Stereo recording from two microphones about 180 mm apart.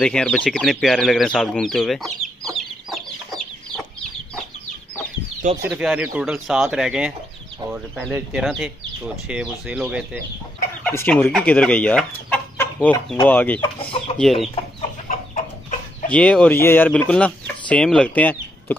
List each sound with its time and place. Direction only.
0.0 s speech: 5° left (ahead or behind)
5.7 s speech: 5° right (ahead or behind)
10.8 s speech: 10° left (ahead or behind)
13.6 s speech: 30° left (ahead or behind)
14.1 s speech: centre (ahead or behind)
16.1 s speech: 5° left (ahead or behind)